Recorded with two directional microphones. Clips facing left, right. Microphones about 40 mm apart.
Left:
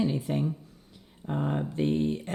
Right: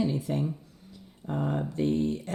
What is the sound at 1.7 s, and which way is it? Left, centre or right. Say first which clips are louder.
Speech: even; left.